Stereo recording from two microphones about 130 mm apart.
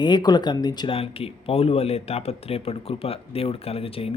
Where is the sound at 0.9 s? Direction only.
45° left (ahead or behind).